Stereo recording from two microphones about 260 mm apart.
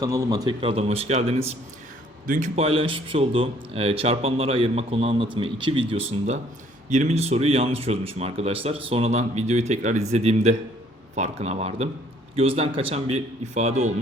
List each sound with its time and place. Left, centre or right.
0.0 s speech: centre